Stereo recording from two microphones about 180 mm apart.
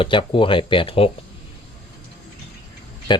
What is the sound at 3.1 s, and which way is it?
Speech, 25° left (ahead or behind).